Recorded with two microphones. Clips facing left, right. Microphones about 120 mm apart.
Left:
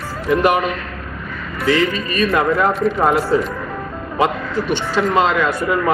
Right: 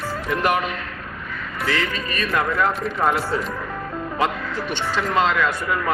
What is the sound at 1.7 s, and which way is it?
Speech, 10° left (ahead or behind).